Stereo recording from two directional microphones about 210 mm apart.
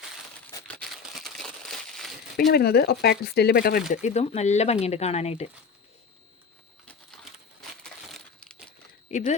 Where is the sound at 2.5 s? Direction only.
50° left (ahead or behind).